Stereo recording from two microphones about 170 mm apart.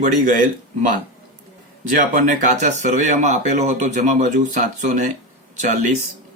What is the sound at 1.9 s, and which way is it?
Speech, 55° right (ahead or behind).